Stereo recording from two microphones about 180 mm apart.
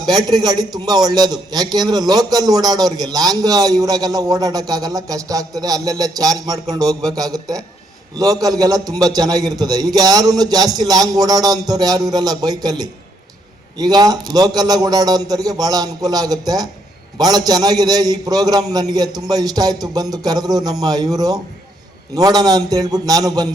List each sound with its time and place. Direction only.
0.0 s a man's voice: 20° right (ahead or behind)